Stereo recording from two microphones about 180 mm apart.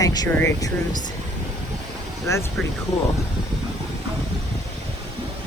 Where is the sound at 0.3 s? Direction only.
10° left (ahead or behind).